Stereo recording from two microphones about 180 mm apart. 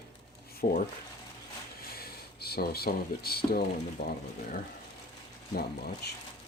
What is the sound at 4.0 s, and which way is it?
Speech, 70° left (ahead or behind).